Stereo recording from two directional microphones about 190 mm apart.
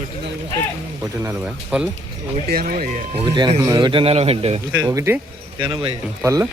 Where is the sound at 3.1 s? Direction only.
25° right (ahead or behind).